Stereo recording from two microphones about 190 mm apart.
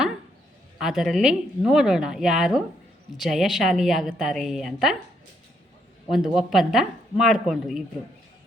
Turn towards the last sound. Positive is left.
turn(degrees=0)  # may be behind; listen again after turning